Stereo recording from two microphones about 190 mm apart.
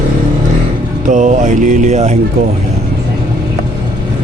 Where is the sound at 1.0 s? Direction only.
40° right (ahead or behind).